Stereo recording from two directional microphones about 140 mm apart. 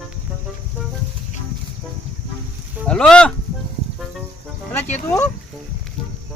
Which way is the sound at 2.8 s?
5° left (ahead or behind).